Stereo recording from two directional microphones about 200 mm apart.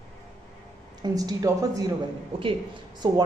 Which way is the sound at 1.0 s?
20° right (ahead or behind).